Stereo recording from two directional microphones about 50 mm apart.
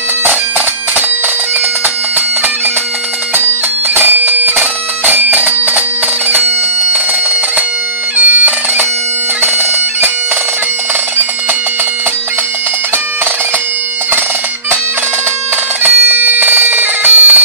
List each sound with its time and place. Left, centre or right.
3.9 s bagpipes: right
8.2 s bagpipes: right
15.8 s bagpipes: right